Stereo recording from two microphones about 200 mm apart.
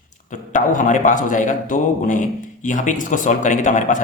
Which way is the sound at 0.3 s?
40° left (ahead or behind).